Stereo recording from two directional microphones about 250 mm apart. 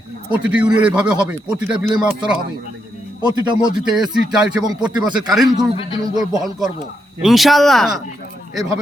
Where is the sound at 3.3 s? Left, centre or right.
Centre.